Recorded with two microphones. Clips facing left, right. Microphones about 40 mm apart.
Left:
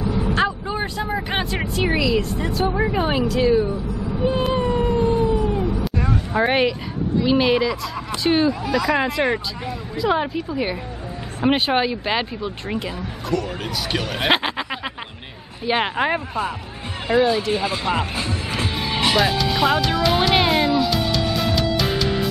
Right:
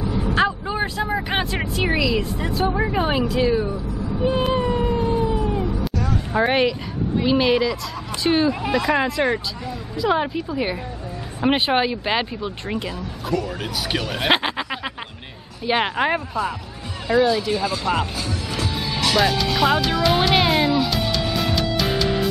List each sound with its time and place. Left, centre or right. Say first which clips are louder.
0.1 s speech: right 2 dB; centre
4.2 s cat: even; centre
6.3 s speech: even; centre
17.1 s speech: even; left
18.8 s music: left 3 dB; left
19.1 s music: right 2 dB; centre